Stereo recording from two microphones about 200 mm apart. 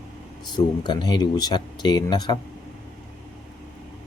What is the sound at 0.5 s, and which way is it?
Speech, 20° left (ahead or behind).